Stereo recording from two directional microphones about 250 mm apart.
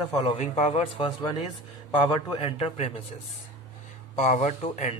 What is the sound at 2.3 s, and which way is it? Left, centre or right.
Speech, left.